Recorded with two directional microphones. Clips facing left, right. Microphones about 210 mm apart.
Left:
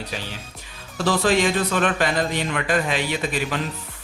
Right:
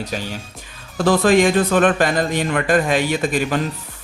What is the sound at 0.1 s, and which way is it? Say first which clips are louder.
Speech: right 6 dB; 45° right (ahead or behind).